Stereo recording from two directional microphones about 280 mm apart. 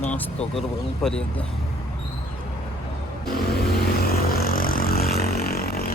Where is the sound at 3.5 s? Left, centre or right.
Left.